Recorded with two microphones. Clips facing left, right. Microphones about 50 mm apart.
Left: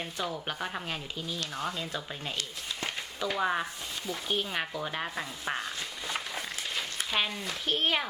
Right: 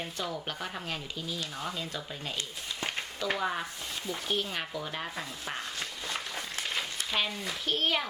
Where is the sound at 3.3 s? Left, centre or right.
Centre.